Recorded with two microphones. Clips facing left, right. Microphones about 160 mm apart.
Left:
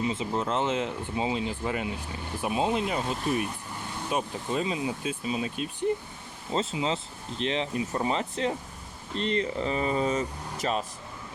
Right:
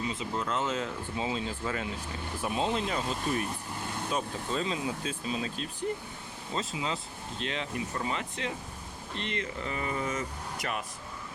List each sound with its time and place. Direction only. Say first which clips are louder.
0.0 s speech: left 5 dB; 25° left (ahead or behind)
6.5 s speech: left 5 dB; 30° left (ahead or behind)